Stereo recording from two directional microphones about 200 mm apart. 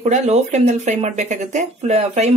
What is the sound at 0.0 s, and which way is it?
Speech, 35° right (ahead or behind).